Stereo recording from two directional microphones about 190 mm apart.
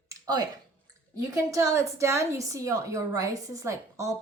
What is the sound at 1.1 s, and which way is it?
A woman's voice, 15° right (ahead or behind).